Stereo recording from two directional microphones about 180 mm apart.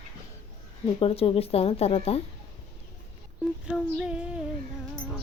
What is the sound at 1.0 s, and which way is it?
Speech, 30° left (ahead or behind).